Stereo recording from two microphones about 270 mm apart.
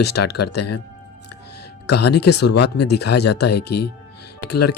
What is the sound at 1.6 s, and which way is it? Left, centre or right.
Speech, left.